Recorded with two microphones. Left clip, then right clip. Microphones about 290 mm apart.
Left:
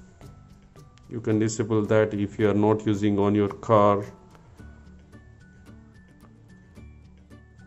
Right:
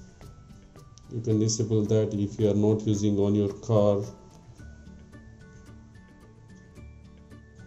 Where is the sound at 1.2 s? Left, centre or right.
Left.